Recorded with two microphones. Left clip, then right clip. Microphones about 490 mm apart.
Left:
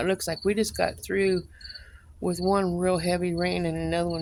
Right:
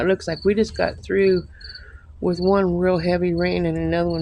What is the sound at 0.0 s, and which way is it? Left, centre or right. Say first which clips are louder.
Speech: right 6 dB; left.